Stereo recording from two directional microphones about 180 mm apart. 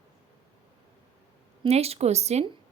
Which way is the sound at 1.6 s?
35° right (ahead or behind).